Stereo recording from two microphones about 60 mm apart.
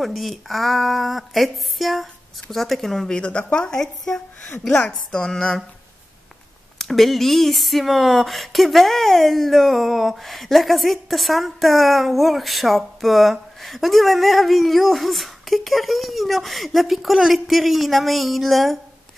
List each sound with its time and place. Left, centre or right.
0.0 s speech: centre
3.2 s a woman's voice: centre
6.8 s speech: centre